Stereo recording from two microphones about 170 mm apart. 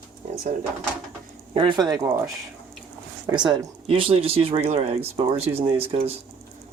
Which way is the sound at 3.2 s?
25° right (ahead or behind).